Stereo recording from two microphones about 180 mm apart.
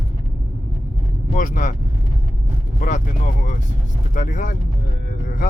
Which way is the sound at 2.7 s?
45° left (ahead or behind).